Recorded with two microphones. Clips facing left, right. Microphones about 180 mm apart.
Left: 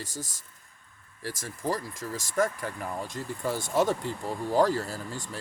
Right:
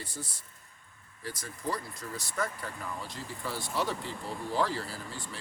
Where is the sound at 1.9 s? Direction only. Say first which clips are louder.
Left 5 dB; 90° left.